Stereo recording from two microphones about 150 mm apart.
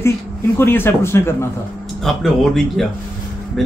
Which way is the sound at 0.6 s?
15° left (ahead or behind).